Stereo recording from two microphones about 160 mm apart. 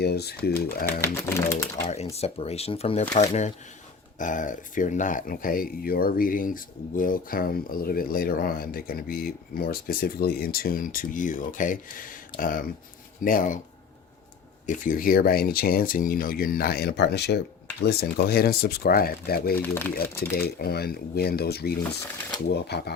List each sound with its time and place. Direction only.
0.0 s speech: 90° left
0.7 s speech: 70° left (ahead or behind)
1.0 s speech: 15° left (ahead or behind)
2.1 s speech: 40° left (ahead or behind); by 13.6 s 55° left (ahead or behind)
14.7 s speech: 55° left (ahead or behind); by 19.5 s 70° left (ahead or behind)
19.5 s speech: 10° left (ahead or behind)
20.0 s speech: 75° left (ahead or behind)
22.4 s speech: 90° left